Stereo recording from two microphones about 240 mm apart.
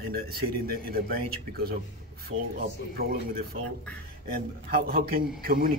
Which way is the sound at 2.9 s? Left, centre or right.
Right.